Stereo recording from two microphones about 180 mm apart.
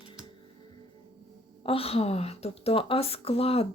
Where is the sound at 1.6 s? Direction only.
30° left (ahead or behind).